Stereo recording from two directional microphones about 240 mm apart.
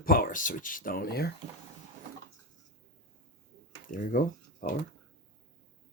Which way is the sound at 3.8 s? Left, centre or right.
Left.